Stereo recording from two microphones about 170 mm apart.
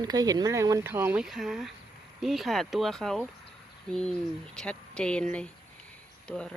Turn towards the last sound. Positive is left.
turn(degrees=5)  # may be behind; listen again after turning